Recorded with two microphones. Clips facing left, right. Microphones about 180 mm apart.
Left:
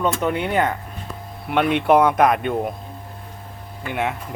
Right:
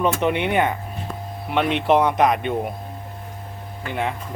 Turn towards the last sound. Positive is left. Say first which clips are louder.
# left 1 dB
turn(degrees=5)  # may be behind; listen again after turning